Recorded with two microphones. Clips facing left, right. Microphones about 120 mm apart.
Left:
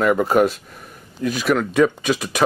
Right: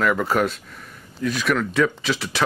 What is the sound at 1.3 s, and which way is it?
Speech, 35° left (ahead or behind).